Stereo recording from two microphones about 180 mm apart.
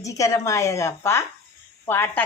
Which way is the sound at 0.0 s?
15° left (ahead or behind).